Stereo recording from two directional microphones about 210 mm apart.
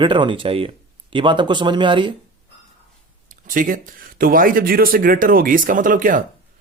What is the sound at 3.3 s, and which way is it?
Speech, 40° right (ahead or behind).